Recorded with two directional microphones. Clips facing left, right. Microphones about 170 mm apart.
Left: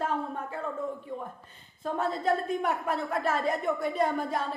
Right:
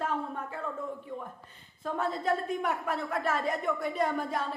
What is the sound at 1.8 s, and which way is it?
A woman's voice, 30° left (ahead or behind).